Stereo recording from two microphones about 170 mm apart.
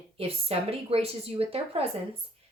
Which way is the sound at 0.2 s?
35° right (ahead or behind).